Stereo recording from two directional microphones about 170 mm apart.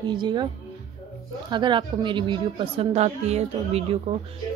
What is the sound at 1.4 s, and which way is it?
A woman's voice, 25° right (ahead or behind).